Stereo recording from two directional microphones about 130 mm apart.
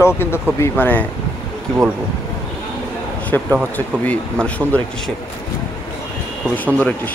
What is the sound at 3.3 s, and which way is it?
Speech, 15° left (ahead or behind).